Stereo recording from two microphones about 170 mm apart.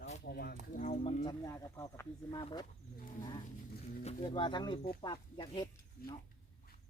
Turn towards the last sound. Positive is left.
turn(degrees=25)  # may be behind; listen again after turning